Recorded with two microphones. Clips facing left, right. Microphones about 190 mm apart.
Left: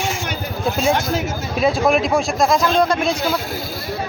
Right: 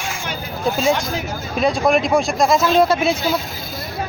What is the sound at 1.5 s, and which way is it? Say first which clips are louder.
A man's voice: even; centre (ahead or behind).